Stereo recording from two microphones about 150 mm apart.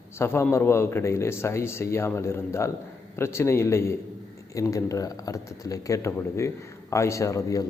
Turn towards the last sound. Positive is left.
turn(degrees=20)  # may be behind; listen again after turning